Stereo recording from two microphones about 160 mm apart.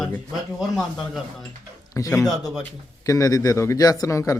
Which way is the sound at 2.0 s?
20° left (ahead or behind).